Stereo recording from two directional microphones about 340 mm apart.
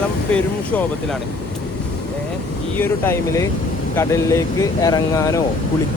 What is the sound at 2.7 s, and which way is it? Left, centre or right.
Speech, centre.